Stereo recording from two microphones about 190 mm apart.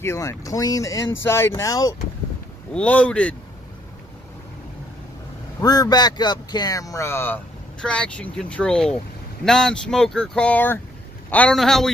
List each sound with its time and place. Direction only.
0.0 s speech: 15° left (ahead or behind)
2.7 s speech: 5° left (ahead or behind)
5.6 s speech: 20° left (ahead or behind); by 11.9 s centre (ahead or behind)